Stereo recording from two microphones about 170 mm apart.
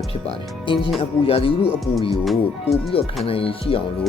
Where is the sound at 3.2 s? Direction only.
35° left (ahead or behind).